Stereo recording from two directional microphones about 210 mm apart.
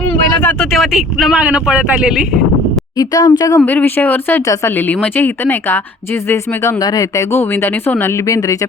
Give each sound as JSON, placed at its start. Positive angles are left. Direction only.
{"t": 0.4, "sound": "speech", "side_deg": 0}
{"t": 3.0, "sound": "speech", "side_deg": 20}
{"t": 3.6, "sound": "speech", "side_deg": 5}